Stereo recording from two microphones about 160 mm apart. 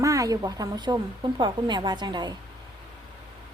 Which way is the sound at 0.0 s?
20° right (ahead or behind).